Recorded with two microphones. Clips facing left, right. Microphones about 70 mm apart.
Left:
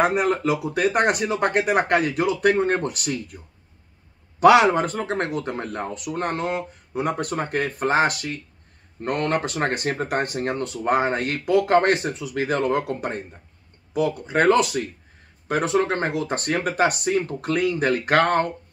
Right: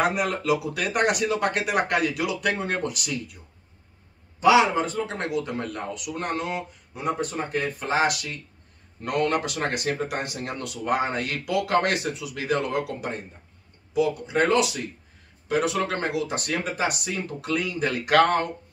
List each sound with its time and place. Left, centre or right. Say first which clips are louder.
0.0 s speech: left 4 dB; left
4.4 s speech: left 4 dB; left